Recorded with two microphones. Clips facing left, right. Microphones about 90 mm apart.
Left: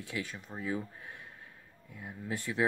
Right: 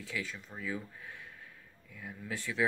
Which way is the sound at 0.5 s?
15° left (ahead or behind).